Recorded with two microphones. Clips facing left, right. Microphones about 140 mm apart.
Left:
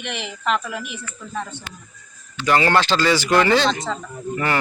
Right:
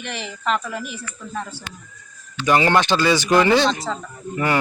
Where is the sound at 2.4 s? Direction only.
15° right (ahead or behind).